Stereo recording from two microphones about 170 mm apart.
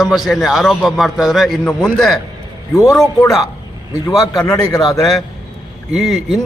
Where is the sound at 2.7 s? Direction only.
20° left (ahead or behind).